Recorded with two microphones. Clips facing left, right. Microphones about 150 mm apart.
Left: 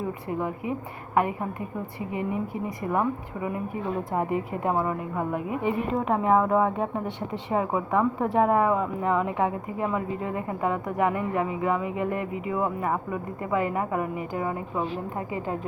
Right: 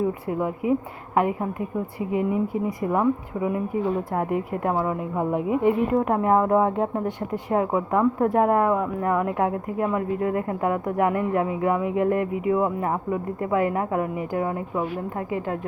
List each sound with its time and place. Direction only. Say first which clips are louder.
0.3 s speech: right 6 dB; 15° right (ahead or behind)
4.1 s a woman's voice: right 2 dB; centre (ahead or behind)
5.1 s speech: right 5 dB; 20° right (ahead or behind)